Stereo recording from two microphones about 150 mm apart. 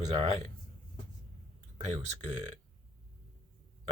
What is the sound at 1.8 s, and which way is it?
Speech, 40° right (ahead or behind).